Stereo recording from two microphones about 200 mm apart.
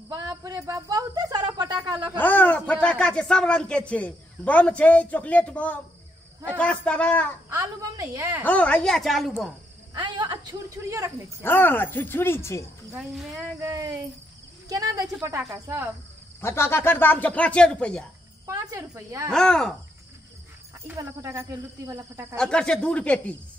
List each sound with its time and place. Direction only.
0.1 s speech: 20° right (ahead or behind)
2.1 s speech: 10° left (ahead or behind)
7.4 s speech: 15° right (ahead or behind)
8.5 s speech: 5° left (ahead or behind)
9.9 s a sound: 25° right (ahead or behind)
11.4 s speech: 10° left (ahead or behind)
12.9 s speech: centre (ahead or behind)
13.6 s speech: 15° right (ahead or behind)
16.3 s speech: 10° left (ahead or behind)
18.5 s speech: 15° right (ahead or behind)
19.3 s speech: 5° left (ahead or behind)
20.8 s speech: 15° right (ahead or behind)
22.4 s speech: 5° left (ahead or behind)